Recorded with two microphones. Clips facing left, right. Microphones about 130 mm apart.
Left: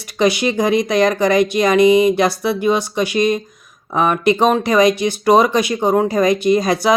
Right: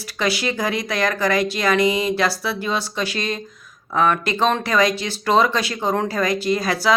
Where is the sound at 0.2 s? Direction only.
20° left (ahead or behind).